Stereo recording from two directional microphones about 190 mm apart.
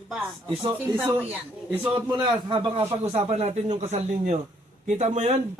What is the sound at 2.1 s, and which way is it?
A man's voice, 25° right (ahead or behind).